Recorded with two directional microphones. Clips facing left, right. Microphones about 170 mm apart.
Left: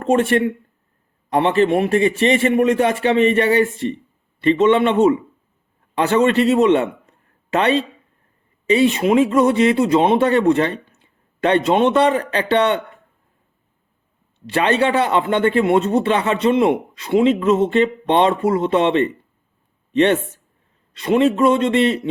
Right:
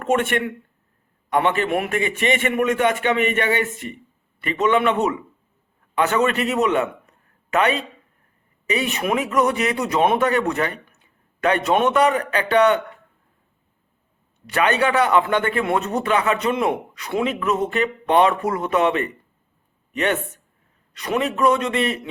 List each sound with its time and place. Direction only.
0.0 s a man's voice: 30° left (ahead or behind)
14.4 s speech: 30° left (ahead or behind)